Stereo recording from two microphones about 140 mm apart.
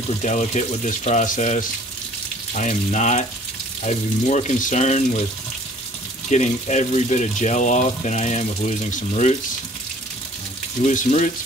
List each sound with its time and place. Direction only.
0.2 s speech: 55° left (ahead or behind)
6.3 s speech: 60° left (ahead or behind)
10.8 s speech: 60° left (ahead or behind)